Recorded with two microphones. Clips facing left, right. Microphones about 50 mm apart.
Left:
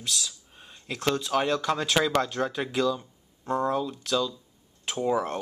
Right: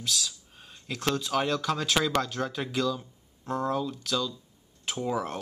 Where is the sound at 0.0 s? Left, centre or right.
Centre.